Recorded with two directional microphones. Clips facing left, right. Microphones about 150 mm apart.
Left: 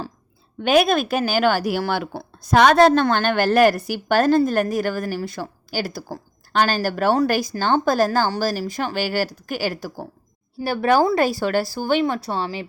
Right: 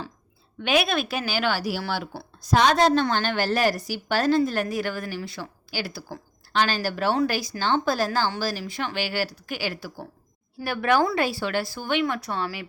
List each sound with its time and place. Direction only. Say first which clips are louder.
0.6 s speech: left 6 dB; 45° left (ahead or behind); by 12.6 s 30° left (ahead or behind)